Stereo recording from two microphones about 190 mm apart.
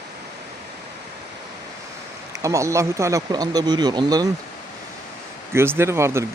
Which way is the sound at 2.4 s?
15° right (ahead or behind).